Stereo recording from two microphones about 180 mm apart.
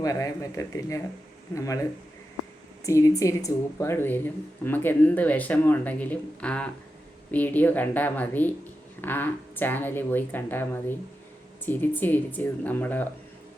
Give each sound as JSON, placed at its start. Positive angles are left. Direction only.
{"t": 0.0, "sound": "speech", "side_deg": 20}